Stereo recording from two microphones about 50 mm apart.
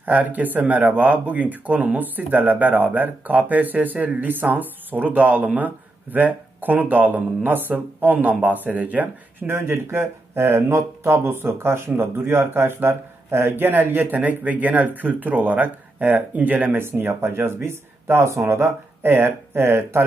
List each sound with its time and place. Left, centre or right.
0.0 s speech: right
9.5 s speech: right